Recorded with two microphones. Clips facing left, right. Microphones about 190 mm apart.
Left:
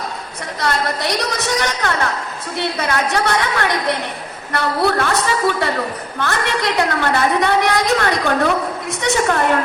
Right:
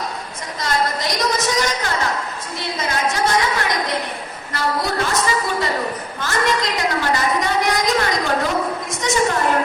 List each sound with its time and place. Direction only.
0.6 s a woman's voice: 65° left (ahead or behind)